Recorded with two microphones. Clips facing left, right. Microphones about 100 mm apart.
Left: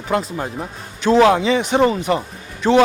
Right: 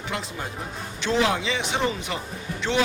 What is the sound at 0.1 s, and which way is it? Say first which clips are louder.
Speech: left 12 dB; 45° left (ahead or behind).